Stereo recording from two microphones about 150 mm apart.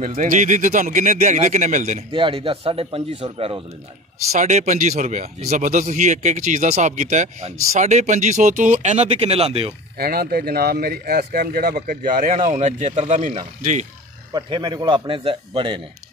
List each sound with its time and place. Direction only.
0.0 s speech: 60° right (ahead or behind)
2.1 s a man's voice: 35° right (ahead or behind)
4.3 s speech: 50° right (ahead or behind)
9.9 s speech: 90° right; by 13.8 s 55° right (ahead or behind)
14.3 s a man's voice: 30° right (ahead or behind)